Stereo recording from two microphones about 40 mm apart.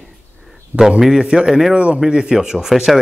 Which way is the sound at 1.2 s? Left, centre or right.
Right.